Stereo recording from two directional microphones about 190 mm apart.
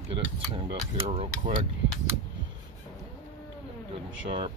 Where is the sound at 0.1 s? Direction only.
25° right (ahead or behind).